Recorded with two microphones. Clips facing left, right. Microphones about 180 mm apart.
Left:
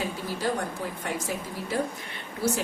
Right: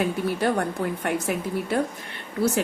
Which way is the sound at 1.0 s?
60° right (ahead or behind).